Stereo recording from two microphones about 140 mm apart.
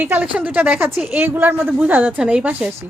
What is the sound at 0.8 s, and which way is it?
Speech, centre (ahead or behind).